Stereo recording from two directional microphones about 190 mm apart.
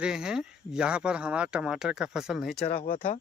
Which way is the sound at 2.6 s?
45° left (ahead or behind).